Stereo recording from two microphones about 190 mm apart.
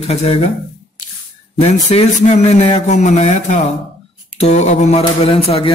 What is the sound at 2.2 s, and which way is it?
A man's voice, 35° left (ahead or behind).